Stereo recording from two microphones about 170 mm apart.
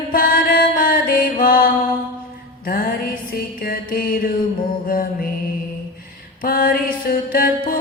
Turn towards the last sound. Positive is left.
turn(degrees=60)  # may be behind; listen again after turning